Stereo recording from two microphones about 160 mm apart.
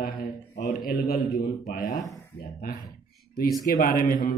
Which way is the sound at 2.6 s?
65° left (ahead or behind).